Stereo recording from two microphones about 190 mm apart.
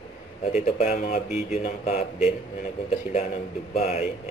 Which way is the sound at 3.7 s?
35° left (ahead or behind).